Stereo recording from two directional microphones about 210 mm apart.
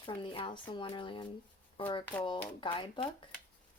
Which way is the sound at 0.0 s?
25° left (ahead or behind).